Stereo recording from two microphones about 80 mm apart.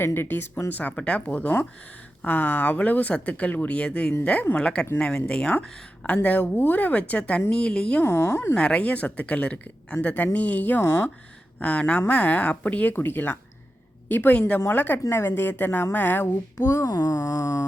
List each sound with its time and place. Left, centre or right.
0.0 s speech: left; by 8.0 s centre
8.0 s speech: left
8.5 s speech: centre
10.8 s speech: left
11.6 s speech: centre; by 16.8 s left
16.8 s a sound: left